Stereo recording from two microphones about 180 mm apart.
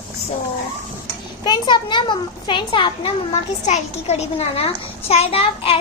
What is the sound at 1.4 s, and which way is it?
A child's voice, 25° left (ahead or behind).